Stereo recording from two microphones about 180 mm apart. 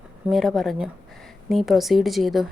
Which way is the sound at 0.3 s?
Centre (ahead or behind).